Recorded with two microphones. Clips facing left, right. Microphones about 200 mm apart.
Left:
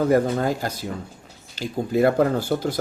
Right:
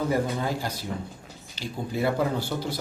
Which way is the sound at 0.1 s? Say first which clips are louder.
Left 7 dB; 50° left (ahead or behind).